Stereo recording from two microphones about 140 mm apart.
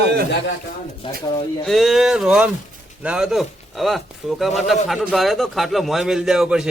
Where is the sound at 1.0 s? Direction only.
40° left (ahead or behind).